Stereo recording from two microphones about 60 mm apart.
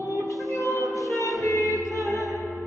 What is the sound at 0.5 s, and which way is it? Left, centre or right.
Music, left.